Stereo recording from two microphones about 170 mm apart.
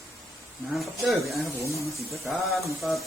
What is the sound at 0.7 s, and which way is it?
Speech, centre (ahead or behind).